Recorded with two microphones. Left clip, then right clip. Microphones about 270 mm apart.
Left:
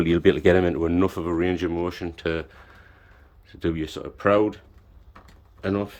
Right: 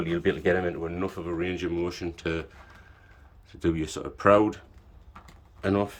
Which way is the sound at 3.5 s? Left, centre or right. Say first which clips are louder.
Left 1 dB; centre.